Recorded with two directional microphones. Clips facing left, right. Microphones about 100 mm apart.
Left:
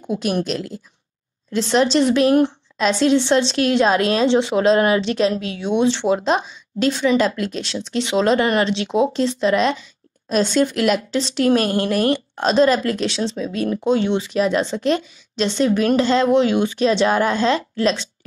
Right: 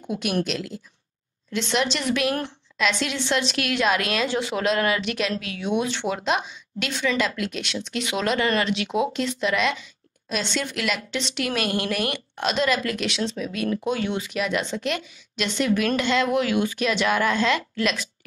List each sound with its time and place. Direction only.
0.0 s speech: 35° left (ahead or behind)